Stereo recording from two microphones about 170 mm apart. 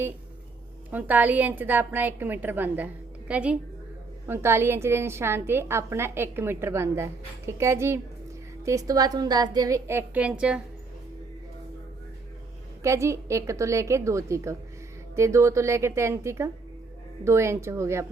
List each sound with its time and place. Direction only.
0.9 s a woman's voice: 10° right (ahead or behind)
12.8 s a woman's voice: 15° right (ahead or behind)